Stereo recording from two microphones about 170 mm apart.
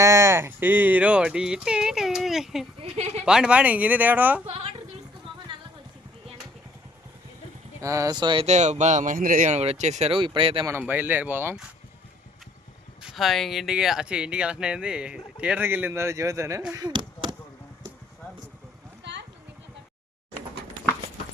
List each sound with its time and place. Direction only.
0.0 s speech: 15° right (ahead or behind)
2.8 s speech: 40° right (ahead or behind)
3.2 s speech: 5° right (ahead or behind)
4.4 s a woman's voice: 35° right (ahead or behind)
7.8 s speech: 20° right (ahead or behind)
8.4 s speech: 40° right (ahead or behind)
10.7 s speech: 10° right (ahead or behind)
13.0 s speech: 5° right (ahead or behind)
16.7 s chop: 25° right (ahead or behind)